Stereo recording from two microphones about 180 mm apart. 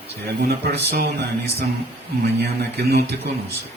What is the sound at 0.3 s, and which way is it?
A man's voice, 65° right (ahead or behind).